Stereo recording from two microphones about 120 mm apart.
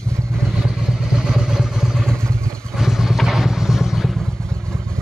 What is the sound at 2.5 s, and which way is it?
Vehicle, centre (ahead or behind).